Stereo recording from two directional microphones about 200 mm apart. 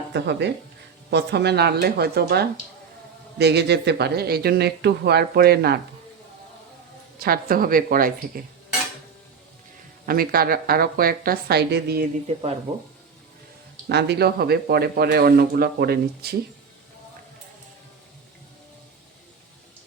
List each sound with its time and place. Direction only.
0.1 s speech: 60° right (ahead or behind)
7.2 s speech: 45° right (ahead or behind)
10.1 s speech: 50° right (ahead or behind)
13.8 s speech: 55° right (ahead or behind)